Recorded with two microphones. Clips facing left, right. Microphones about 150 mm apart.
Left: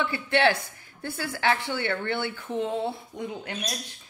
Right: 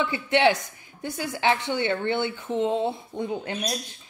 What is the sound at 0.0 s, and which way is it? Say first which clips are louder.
Speech: right 2 dB; 20° right (ahead or behind).